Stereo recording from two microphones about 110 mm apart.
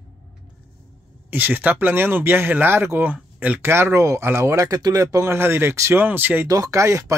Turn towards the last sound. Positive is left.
turn(degrees=-30)  # may be behind; listen again after turning